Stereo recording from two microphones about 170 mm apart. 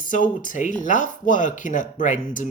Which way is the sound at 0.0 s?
50° left (ahead or behind).